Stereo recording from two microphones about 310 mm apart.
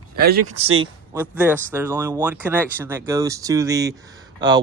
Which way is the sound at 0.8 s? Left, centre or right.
Centre.